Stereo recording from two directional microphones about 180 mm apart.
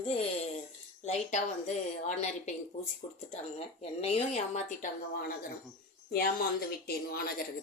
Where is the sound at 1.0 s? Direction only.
40° left (ahead or behind).